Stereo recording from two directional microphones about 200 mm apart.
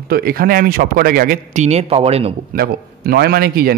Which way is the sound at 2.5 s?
50° right (ahead or behind).